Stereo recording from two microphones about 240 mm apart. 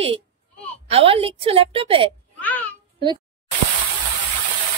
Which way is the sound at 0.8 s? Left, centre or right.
Right.